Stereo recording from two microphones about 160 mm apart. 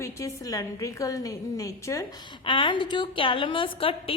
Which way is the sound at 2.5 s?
30° left (ahead or behind).